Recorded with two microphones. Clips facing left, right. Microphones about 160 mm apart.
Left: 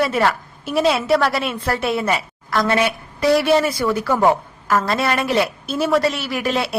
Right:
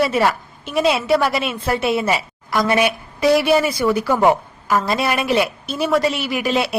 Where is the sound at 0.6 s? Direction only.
Centre (ahead or behind).